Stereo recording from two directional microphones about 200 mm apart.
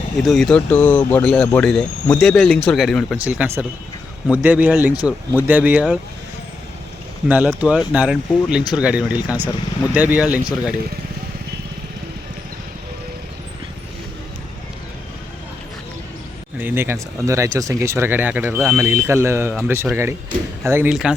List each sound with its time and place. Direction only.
0.3 s speech: centre (ahead or behind)
7.3 s speech: 5° right (ahead or behind)
16.6 s speech: 10° right (ahead or behind)